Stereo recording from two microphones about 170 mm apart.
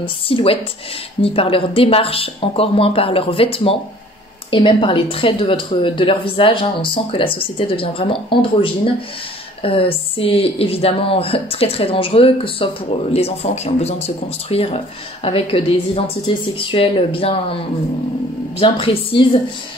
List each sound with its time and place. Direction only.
0.0 s speech: 35° left (ahead or behind)
18.6 s speech: 35° left (ahead or behind)